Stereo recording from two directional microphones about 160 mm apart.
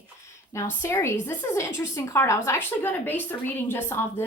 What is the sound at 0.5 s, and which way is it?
A woman's voice, 20° left (ahead or behind).